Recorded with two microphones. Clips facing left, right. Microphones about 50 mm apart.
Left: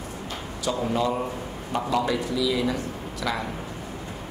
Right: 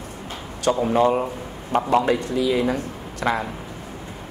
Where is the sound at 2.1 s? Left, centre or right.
Right.